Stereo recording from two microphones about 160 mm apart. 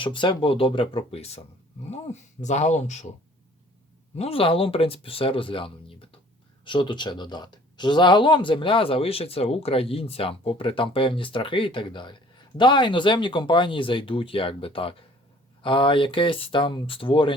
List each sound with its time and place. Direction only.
0.0 s speech: 30° left (ahead or behind); by 3.1 s 45° left (ahead or behind)
4.2 s speech: 35° left (ahead or behind)